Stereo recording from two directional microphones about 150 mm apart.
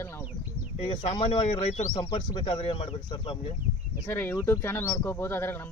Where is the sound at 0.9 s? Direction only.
35° left (ahead or behind).